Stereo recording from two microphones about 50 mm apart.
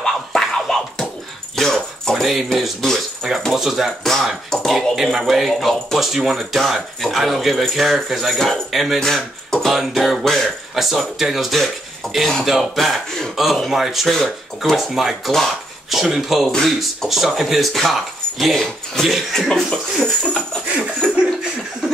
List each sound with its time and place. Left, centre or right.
0.0 s scratching: centre
1.6 s keys jangling: centre
2.2 s speech: centre
3.5 s speech: centre
4.0 s speech: centre
10.7 s speech: centre
20.7 s laughter: right